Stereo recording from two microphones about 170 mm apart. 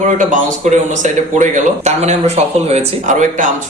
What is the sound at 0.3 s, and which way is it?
Speech, 45° right (ahead or behind).